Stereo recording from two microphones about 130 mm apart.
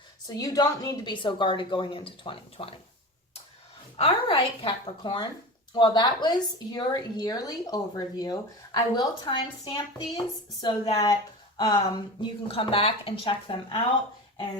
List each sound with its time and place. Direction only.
0.3 s a woman's voice: 25° left (ahead or behind); by 2.7 s 45° left (ahead or behind)
3.9 s a woman's voice: 45° left (ahead or behind)
12.5 s a woman's voice: 45° left (ahead or behind)